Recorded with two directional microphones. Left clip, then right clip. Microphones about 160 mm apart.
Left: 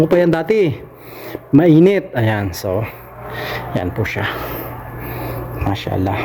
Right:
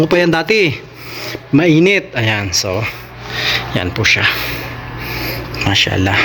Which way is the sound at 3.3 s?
10° left (ahead or behind).